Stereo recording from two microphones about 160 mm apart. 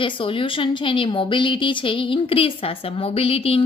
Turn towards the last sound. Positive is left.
turn(degrees=35)  # may be behind; listen again after turning